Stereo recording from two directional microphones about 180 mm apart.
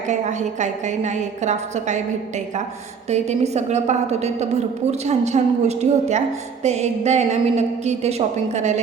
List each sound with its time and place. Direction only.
0.1 s a woman's voice: 40° right (ahead or behind)
3.1 s a woman's voice: 40° right (ahead or behind)